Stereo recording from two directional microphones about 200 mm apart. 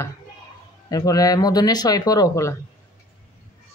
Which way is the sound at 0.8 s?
20° left (ahead or behind).